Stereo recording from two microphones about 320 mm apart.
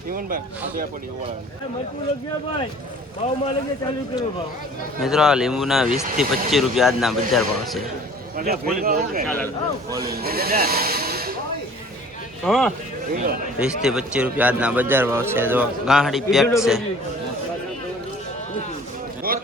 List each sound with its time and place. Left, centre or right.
0.1 s speech: right
4.9 s a man's voice: centre
8.4 s speech: right
9.2 s a man's voice: centre
10.0 s speech: right
12.5 s a man's voice: centre
19.3 s a sound: right